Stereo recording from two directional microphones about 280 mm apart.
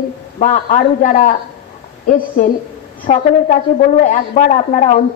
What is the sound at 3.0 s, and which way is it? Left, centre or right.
A woman's voice, left.